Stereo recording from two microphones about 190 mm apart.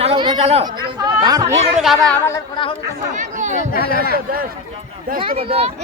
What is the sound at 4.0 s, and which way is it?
Speech, 55° right (ahead or behind).